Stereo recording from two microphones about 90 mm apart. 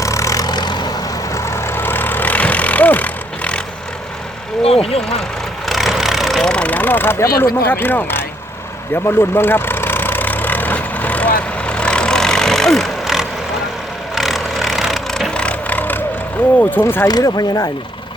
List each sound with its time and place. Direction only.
0.0 s vehicle: 35° left (ahead or behind); by 0.9 s 50° left (ahead or behind)
1.4 s vehicle: 30° left (ahead or behind); by 3.6 s 15° left (ahead or behind)
4.6 s vehicle: 90° left
5.6 s vehicle: centre (ahead or behind)
15.4 s vehicle: 15° left (ahead or behind)
16.8 s speech: 25° left (ahead or behind)
17.1 s speech: 45° left (ahead or behind)